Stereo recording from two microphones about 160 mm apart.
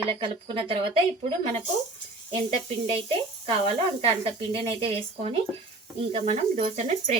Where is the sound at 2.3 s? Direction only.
30° right (ahead or behind).